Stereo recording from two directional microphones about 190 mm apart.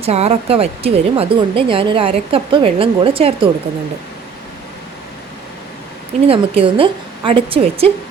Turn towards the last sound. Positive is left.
turn(degrees=-30)  # may be behind; listen again after turning